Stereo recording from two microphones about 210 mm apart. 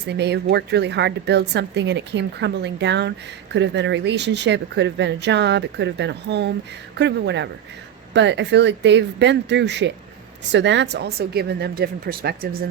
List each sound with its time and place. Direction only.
0.1 s a woman's voice: 55° right (ahead or behind)